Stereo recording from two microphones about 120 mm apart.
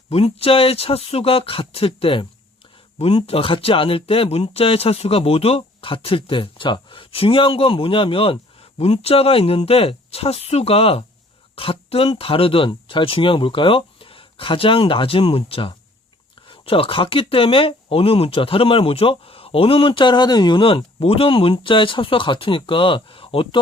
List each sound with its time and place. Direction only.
0.1 s speech: 55° left (ahead or behind)
3.2 s speech: 50° left (ahead or behind)